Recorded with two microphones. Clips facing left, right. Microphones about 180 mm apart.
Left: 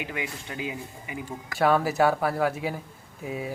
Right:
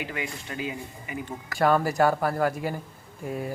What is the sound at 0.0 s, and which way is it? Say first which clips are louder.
Speech: even; 15° left (ahead or behind).